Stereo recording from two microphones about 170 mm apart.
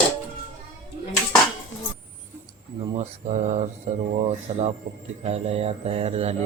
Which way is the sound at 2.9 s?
40° right (ahead or behind).